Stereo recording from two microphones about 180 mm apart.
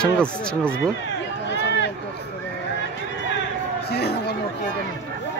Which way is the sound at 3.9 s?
65° left (ahead or behind).